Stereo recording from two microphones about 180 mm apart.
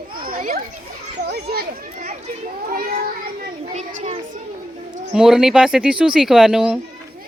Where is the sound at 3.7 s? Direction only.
40° right (ahead or behind).